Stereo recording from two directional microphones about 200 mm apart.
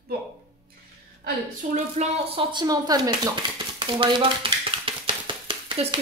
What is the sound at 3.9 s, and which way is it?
Stir, 25° right (ahead or behind).